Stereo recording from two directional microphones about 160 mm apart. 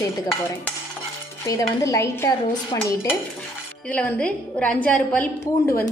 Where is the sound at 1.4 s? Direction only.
20° left (ahead or behind).